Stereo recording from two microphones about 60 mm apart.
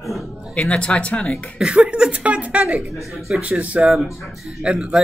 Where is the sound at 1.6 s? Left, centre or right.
Centre.